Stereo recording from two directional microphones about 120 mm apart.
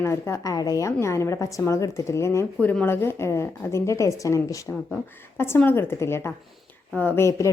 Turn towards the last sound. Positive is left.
turn(degrees=25)  # may be behind; listen again after turning